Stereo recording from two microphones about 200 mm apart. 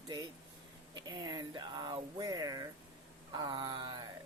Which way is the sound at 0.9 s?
20° right (ahead or behind).